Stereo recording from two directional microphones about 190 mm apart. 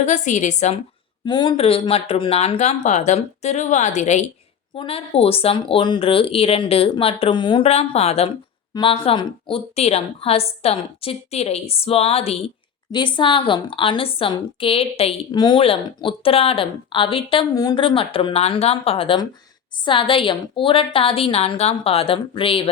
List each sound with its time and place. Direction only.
0.0 s a woman's voice: 40° left (ahead or behind)
1.2 s a woman's voice: 25° left (ahead or behind)